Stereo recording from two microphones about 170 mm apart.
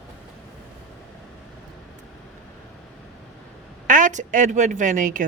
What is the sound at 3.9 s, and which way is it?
A woman's voice, 45° right (ahead or behind).